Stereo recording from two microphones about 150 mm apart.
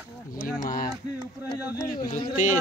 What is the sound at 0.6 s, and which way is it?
Speech, 65° left (ahead or behind).